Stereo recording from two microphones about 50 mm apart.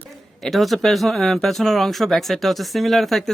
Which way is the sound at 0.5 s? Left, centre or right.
Centre.